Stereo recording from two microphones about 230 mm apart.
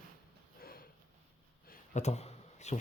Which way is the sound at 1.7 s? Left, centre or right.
Left.